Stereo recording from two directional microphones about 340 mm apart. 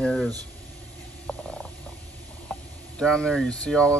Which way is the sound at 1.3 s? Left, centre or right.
Centre.